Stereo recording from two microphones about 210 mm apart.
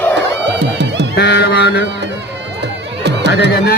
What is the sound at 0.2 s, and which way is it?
Music, 55° right (ahead or behind).